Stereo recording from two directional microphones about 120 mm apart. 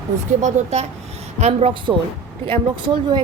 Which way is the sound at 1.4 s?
55° right (ahead or behind).